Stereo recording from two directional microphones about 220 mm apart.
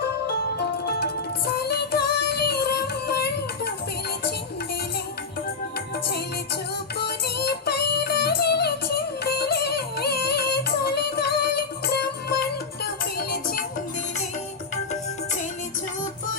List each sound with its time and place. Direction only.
0.6 s music: 45° left (ahead or behind)
7.0 s music: 50° left (ahead or behind)